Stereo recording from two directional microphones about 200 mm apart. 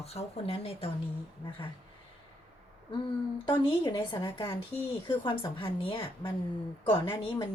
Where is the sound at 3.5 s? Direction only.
25° left (ahead or behind).